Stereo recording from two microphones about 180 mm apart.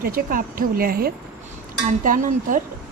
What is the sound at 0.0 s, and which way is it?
A woman's voice, 50° right (ahead or behind).